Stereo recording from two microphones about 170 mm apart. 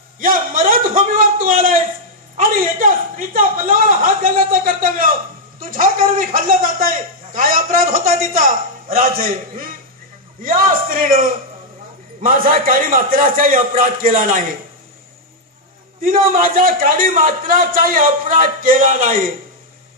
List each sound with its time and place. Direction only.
0.2 s a sound: 55° right (ahead or behind)
2.4 s a man's voice: 55° right (ahead or behind)
16.0 s a man's voice: 55° right (ahead or behind)